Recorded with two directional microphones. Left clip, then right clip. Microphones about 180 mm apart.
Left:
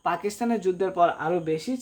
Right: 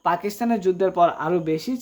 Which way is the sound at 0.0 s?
30° right (ahead or behind).